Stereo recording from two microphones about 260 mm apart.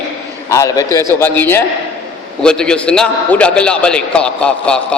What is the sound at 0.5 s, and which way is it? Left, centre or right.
A man's voice, centre.